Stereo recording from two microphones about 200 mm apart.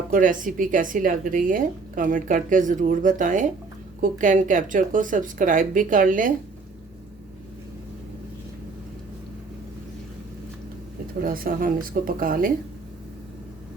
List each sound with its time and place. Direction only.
0.1 s speech: 40° right (ahead or behind)
11.2 s speech: 45° right (ahead or behind)